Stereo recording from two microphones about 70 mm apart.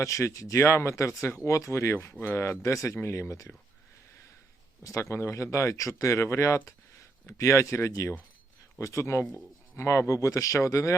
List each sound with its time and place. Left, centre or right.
0.0 s speech: left
4.8 s speech: left